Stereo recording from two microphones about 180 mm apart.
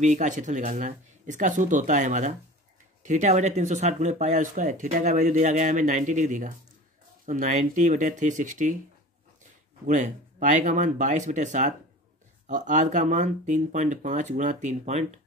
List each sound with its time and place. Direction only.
0.0 s speech: 40° right (ahead or behind)
9.8 s speech: 40° right (ahead or behind)